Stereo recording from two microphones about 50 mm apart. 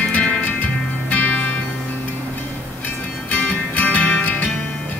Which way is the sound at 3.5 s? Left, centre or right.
Left.